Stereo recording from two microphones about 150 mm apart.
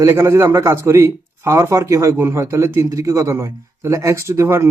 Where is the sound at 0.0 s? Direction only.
20° right (ahead or behind).